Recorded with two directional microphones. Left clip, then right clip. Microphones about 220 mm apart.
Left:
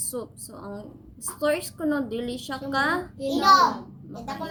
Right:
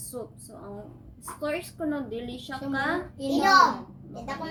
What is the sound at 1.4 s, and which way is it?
Child singing, 50° left (ahead or behind).